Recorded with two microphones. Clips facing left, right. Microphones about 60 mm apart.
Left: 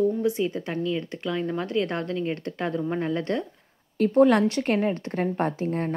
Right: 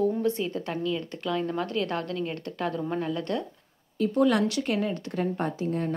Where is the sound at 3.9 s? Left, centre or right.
Left.